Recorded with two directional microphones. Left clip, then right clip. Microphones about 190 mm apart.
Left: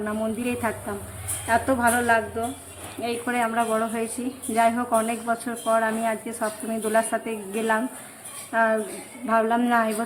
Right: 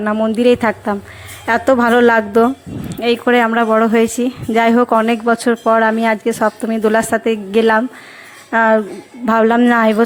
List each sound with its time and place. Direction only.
0.0 s speech: 35° right (ahead or behind)